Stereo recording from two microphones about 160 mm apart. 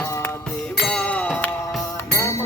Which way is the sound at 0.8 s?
5° left (ahead or behind).